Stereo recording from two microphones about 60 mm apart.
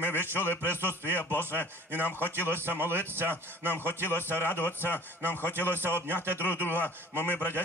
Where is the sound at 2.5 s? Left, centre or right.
Right.